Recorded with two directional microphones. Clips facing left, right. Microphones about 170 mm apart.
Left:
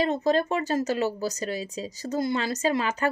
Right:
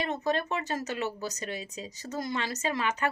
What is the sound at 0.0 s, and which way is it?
A woman's voice, 30° left (ahead or behind).